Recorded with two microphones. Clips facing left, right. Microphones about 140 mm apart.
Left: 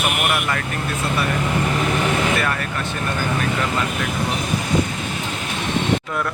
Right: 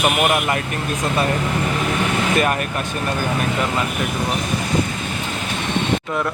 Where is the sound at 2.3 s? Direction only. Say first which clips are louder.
Right 3 dB; 20° right (ahead or behind).